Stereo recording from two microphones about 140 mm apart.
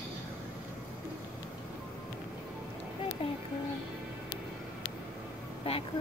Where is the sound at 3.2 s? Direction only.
40° left (ahead or behind).